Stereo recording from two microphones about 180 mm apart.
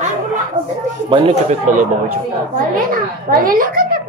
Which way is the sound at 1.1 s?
35° right (ahead or behind).